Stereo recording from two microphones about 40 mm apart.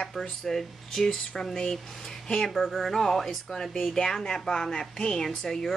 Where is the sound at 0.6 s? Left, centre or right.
Centre.